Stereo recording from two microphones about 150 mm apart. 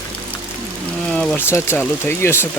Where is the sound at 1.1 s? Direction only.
5° left (ahead or behind).